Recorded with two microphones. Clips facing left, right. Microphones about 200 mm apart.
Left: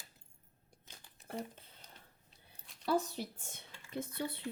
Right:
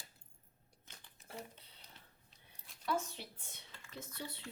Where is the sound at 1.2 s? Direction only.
50° left (ahead or behind).